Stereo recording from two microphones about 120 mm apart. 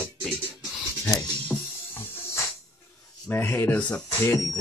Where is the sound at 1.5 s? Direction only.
20° left (ahead or behind).